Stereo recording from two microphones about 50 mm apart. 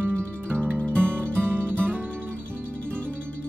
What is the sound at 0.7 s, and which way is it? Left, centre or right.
Music, centre.